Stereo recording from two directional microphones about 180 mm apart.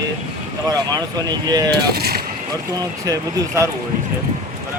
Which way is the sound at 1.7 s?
60° right (ahead or behind).